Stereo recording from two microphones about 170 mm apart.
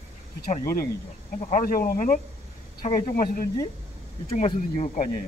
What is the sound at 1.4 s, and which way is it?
Speech, 45° left (ahead or behind).